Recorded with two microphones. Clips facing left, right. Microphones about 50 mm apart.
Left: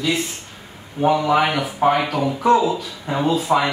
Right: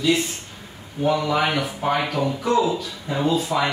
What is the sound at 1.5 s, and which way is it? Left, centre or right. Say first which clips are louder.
Speech: left 4 dB; centre.